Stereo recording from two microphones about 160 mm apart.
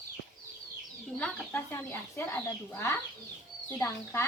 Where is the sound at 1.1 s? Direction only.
10° left (ahead or behind).